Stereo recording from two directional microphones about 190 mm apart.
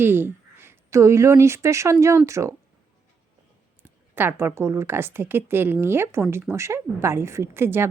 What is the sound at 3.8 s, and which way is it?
Speech, 10° right (ahead or behind).